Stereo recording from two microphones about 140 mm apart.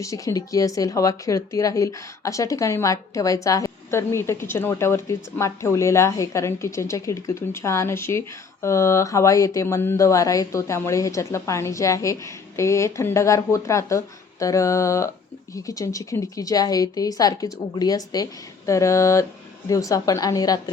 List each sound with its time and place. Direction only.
0.0 s speech: 25° left (ahead or behind)